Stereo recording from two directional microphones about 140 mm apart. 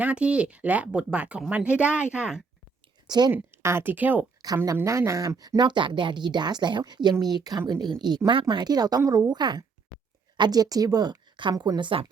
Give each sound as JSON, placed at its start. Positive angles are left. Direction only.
{"t": 0.0, "sound": "speech", "side_deg": -10}
{"t": 3.1, "sound": "speech", "side_deg": -30}
{"t": 3.3, "sound": "speech", "side_deg": -15}
{"t": 4.4, "sound": "speech", "side_deg": -25}